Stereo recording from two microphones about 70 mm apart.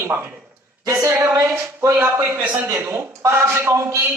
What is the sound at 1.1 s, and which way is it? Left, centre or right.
Speech, right.